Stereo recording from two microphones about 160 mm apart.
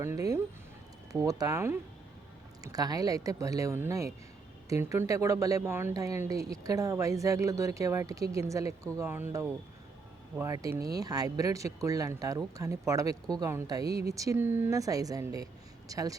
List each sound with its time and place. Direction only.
0.0 s speech: 20° right (ahead or behind)